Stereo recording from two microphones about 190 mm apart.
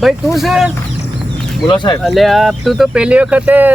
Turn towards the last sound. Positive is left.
turn(degrees=-10)  # may be behind; listen again after turning